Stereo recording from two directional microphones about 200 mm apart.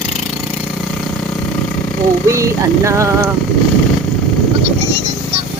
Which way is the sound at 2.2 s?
15° right (ahead or behind).